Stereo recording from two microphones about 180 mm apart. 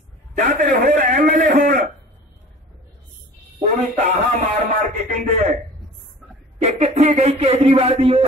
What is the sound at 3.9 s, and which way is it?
Speech, 35° right (ahead or behind).